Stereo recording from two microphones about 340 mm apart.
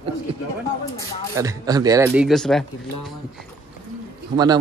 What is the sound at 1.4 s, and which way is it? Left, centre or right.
A man's voice, centre.